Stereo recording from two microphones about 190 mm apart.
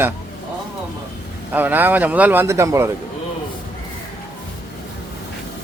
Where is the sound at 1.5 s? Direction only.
10° right (ahead or behind).